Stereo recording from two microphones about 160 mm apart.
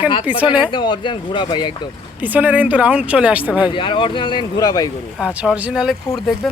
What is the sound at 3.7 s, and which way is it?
Speech, 30° left (ahead or behind).